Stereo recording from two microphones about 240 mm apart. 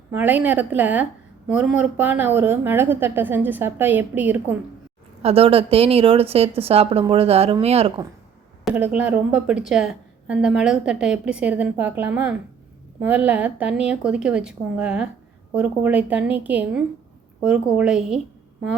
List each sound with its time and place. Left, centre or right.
0.1 s a woman's voice: centre
5.2 s a woman's voice: right
8.7 s a woman's voice: centre